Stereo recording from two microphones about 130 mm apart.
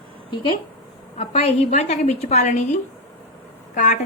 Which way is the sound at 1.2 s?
50° left (ahead or behind).